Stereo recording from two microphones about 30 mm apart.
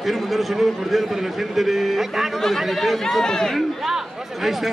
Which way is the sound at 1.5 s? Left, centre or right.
Centre.